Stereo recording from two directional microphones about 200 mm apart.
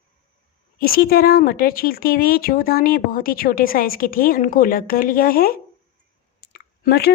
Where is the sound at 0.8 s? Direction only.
50° left (ahead or behind).